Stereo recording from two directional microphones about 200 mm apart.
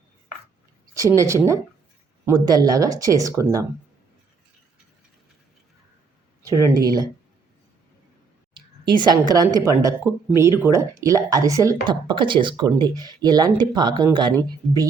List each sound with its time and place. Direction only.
0.9 s speech: 15° right (ahead or behind)
6.4 s speech: 15° right (ahead or behind)
9.0 s speech: 20° right (ahead or behind)